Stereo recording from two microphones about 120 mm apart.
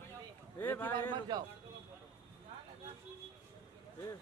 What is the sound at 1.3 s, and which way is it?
Speech, 35° right (ahead or behind).